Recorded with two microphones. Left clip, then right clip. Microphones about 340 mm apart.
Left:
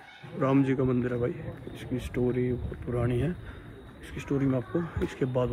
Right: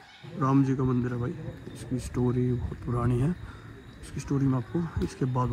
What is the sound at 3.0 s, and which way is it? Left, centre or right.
A man's voice, centre.